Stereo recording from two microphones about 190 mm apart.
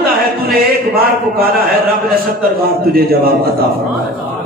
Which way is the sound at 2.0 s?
50° right (ahead or behind).